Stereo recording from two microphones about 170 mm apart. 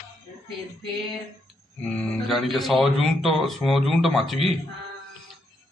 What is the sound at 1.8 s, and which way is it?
Speech, 5° left (ahead or behind).